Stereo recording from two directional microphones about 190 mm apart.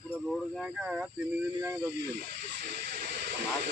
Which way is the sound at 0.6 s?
5° right (ahead or behind).